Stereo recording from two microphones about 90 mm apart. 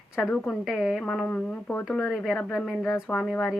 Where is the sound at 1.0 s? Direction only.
15° left (ahead or behind).